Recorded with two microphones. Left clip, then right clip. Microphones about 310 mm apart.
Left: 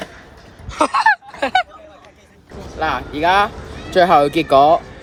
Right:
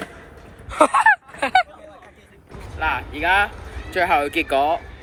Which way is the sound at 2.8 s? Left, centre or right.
Centre.